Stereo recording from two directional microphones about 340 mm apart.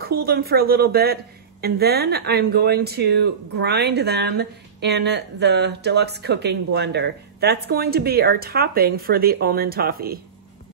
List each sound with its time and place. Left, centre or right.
0.0 s a woman's voice: right